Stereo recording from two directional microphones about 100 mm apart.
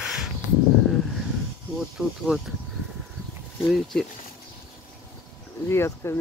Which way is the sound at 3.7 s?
5° left (ahead or behind).